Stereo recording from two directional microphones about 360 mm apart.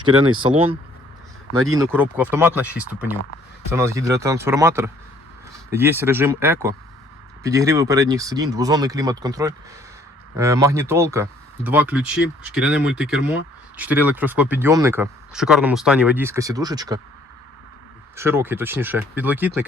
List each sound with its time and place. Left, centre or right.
0.3 s speech: centre
18.2 s speech: centre